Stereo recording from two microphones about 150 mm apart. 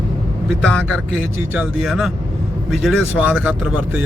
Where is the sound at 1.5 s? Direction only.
5° right (ahead or behind).